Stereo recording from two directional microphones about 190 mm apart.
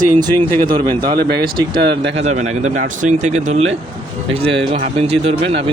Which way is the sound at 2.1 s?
35° right (ahead or behind).